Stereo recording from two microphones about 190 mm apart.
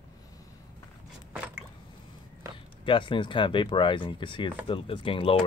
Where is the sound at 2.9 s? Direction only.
25° left (ahead or behind).